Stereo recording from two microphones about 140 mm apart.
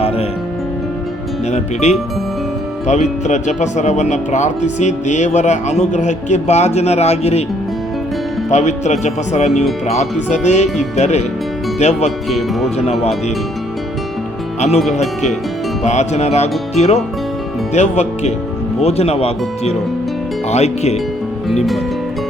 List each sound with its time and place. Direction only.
1.5 s speech: 50° left (ahead or behind)
8.4 s speech: 55° left (ahead or behind)
15.8 s speech: 55° left (ahead or behind)